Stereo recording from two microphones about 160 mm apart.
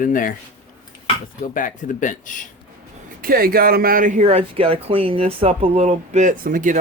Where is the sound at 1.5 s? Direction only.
55° left (ahead or behind).